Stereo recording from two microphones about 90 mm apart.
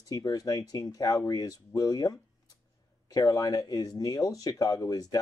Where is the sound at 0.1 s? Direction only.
45° left (ahead or behind).